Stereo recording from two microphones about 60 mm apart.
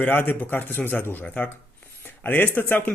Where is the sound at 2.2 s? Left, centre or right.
Left.